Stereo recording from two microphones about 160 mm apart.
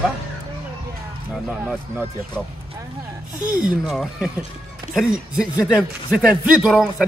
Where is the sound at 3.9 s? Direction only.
Centre (ahead or behind).